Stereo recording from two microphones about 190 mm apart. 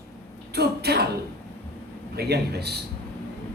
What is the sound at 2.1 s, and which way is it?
Speech, 60° right (ahead or behind).